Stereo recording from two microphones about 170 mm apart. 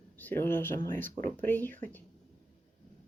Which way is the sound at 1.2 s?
50° right (ahead or behind).